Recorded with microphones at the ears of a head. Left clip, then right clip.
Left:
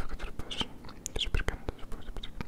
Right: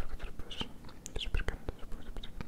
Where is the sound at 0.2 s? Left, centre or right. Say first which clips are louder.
Left 7 dB; left.